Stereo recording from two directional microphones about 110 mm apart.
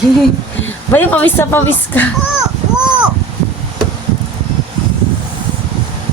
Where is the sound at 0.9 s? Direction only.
15° left (ahead or behind).